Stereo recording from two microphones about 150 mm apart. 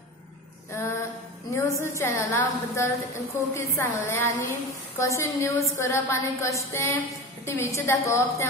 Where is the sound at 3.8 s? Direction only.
15° left (ahead or behind).